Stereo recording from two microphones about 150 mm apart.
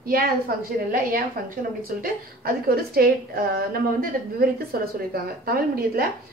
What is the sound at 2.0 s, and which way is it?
Speech, 90° right.